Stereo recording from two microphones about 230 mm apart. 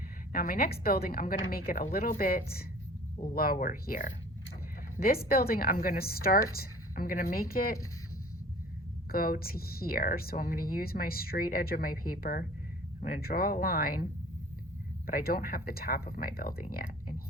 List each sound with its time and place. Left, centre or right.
0.3 s speech: left
9.1 s speech: left